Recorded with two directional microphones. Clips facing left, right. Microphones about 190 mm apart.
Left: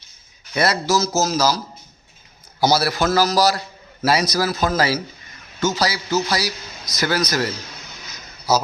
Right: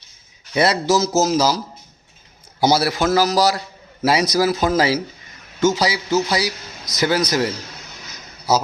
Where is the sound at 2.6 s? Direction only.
25° right (ahead or behind).